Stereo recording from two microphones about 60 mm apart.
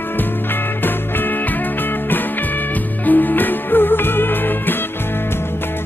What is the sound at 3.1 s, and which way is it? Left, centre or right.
Music, left.